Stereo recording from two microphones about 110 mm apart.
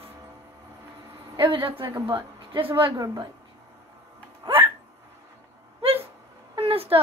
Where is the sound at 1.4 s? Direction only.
50° right (ahead or behind).